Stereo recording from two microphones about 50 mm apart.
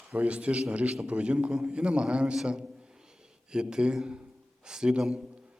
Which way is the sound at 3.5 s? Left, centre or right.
Centre.